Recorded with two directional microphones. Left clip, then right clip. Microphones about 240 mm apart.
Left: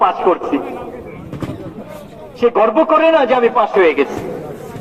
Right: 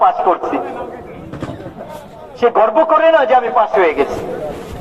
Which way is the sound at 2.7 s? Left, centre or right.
Left.